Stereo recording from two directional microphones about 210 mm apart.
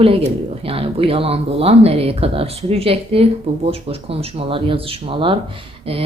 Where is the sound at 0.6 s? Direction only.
25° right (ahead or behind).